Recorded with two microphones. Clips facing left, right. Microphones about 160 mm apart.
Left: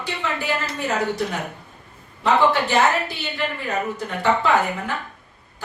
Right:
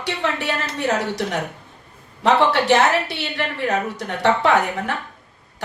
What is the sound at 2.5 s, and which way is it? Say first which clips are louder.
A woman's voice: right 3 dB; 75° right (ahead or behind).